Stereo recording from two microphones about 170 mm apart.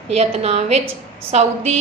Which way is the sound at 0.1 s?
40° right (ahead or behind).